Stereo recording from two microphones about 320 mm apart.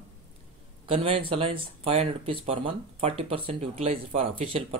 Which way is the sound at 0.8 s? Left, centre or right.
Centre.